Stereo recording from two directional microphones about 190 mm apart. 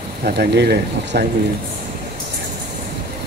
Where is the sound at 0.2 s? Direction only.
60° right (ahead or behind).